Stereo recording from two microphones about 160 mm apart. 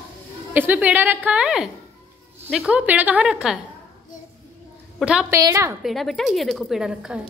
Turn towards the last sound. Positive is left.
turn(degrees=-5)  # may be behind; listen again after turning